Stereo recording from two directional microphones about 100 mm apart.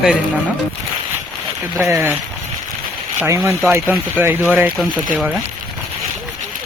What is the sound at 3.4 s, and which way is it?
Speech, 30° right (ahead or behind).